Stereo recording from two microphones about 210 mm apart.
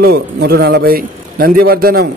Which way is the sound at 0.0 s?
50° right (ahead or behind).